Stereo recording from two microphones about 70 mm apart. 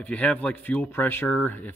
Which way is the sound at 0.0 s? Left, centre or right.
Centre.